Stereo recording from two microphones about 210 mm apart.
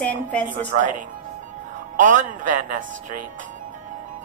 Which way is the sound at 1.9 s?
40° right (ahead or behind).